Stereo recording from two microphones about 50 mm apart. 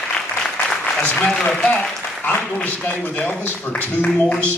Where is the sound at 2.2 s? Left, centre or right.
Left.